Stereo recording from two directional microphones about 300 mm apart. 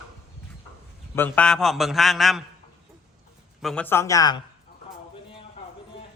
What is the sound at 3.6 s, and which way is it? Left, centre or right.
Speech, centre.